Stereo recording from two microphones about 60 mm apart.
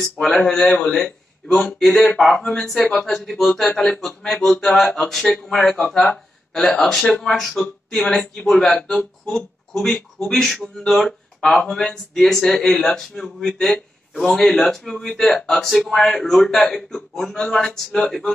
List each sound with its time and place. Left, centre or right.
0.4 s speech: centre